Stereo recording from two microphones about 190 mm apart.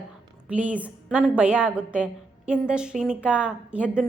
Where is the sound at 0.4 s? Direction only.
5° right (ahead or behind).